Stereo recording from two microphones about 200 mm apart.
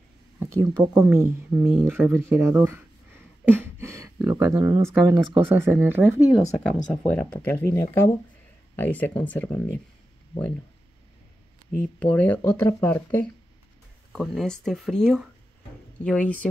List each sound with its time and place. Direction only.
0.4 s speech: 20° right (ahead or behind)
7.4 s speech: 10° left (ahead or behind)
12.0 s speech: 5° left (ahead or behind)